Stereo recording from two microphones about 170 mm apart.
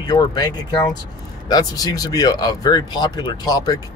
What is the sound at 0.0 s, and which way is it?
Speech, 25° left (ahead or behind).